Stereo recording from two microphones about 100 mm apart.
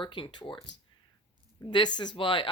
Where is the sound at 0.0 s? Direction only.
55° left (ahead or behind).